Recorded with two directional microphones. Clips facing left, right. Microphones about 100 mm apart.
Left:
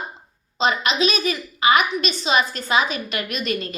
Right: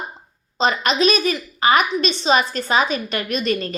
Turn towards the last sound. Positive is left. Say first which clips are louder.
# right 4 dB
turn(degrees=-35)  # may be behind; listen again after turning